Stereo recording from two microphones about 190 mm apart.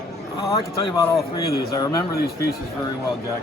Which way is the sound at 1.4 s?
55° left (ahead or behind).